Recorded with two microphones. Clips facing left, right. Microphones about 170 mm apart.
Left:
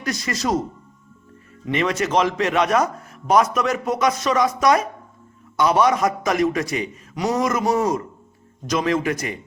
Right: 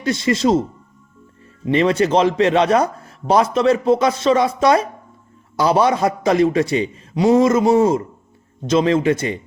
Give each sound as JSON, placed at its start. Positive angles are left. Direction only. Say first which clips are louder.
{"t": 0.0, "sound": "a man's voice", "louder": "right 8 dB", "side_deg": -25}
{"t": 1.6, "sound": "a man's voice", "louder": "right 6 dB", "side_deg": -30}